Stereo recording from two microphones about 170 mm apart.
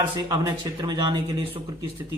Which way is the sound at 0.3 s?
20° right (ahead or behind).